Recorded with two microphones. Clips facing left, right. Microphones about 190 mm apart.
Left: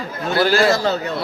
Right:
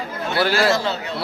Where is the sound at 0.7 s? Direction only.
40° left (ahead or behind).